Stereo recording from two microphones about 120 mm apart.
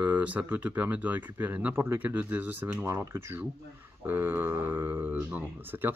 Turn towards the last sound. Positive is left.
turn(degrees=-15)  # may be behind; listen again after turning